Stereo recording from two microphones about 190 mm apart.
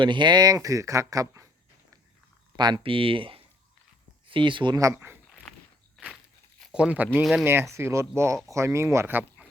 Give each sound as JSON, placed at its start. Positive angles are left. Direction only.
{"t": 0.0, "sound": "speech", "side_deg": -25}
{"t": 2.6, "sound": "speech", "side_deg": -25}
{"t": 6.0, "sound": "walk", "side_deg": 0}
{"t": 6.6, "sound": "speech", "side_deg": 0}